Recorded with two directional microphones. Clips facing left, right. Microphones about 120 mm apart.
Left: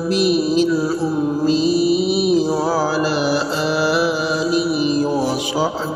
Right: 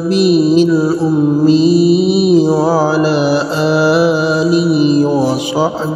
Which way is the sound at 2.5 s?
35° right (ahead or behind).